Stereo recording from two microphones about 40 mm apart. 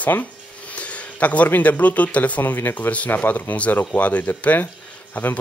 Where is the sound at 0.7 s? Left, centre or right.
Left.